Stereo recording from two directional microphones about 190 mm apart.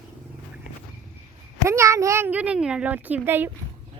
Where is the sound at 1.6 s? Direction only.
15° right (ahead or behind).